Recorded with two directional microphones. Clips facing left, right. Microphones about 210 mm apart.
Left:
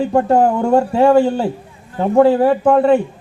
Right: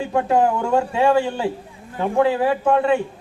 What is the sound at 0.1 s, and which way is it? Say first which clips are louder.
A man's voice: left 2 dB; 40° left (ahead or behind).